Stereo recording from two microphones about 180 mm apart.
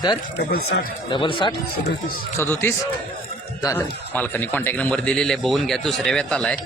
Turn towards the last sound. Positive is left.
turn(degrees=5)  # may be behind; listen again after turning